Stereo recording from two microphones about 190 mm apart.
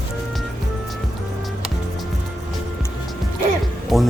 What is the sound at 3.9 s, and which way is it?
Speech, centre (ahead or behind).